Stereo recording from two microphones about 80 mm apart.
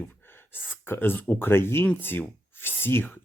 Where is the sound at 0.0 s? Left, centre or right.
Left.